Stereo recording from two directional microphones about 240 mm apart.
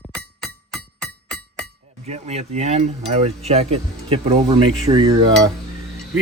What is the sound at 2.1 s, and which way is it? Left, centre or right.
Speech, right.